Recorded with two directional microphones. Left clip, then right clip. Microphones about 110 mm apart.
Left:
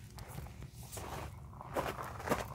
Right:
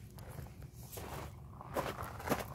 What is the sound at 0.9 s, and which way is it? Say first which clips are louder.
Walk: left 2 dB; 55° left (ahead or behind).